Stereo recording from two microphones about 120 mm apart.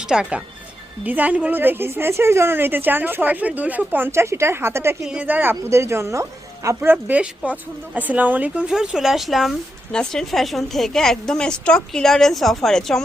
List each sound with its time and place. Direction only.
0.1 s a woman's voice: 10° right (ahead or behind)